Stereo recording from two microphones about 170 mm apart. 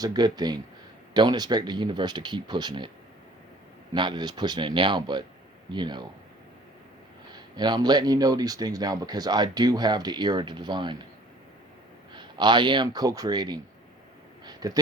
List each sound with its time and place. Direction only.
0.0 s speech: 25° right (ahead or behind)
3.9 s speech: 25° right (ahead or behind)
7.3 s speech: 25° right (ahead or behind)
12.1 s speech: 25° right (ahead or behind)
14.4 s a sound: 20° right (ahead or behind)